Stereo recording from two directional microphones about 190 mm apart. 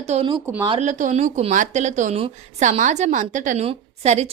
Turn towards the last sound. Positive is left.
turn(degrees=-35)  # may be behind; listen again after turning